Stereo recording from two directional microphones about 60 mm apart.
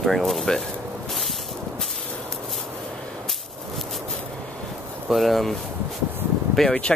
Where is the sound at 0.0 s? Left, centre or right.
Centre.